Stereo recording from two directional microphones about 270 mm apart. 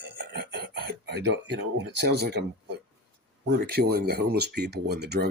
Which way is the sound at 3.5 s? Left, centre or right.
Right.